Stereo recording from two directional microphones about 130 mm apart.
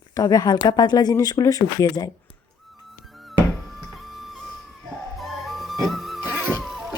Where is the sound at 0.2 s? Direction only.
30° left (ahead or behind).